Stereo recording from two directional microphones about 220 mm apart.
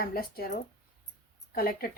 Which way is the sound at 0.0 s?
45° left (ahead or behind).